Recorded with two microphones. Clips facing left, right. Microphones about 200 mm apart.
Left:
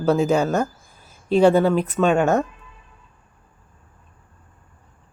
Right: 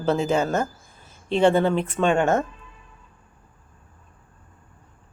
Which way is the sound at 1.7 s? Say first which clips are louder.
Left 3 dB; 25° right (ahead or behind).